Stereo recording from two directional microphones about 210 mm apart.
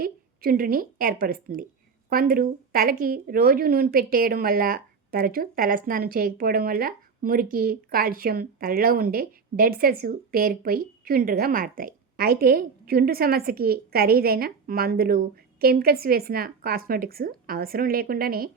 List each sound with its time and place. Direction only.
0.0 s a woman's voice: 45° right (ahead or behind)